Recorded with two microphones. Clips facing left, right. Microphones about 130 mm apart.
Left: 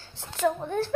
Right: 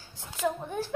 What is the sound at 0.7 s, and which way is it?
Speech, 10° right (ahead or behind).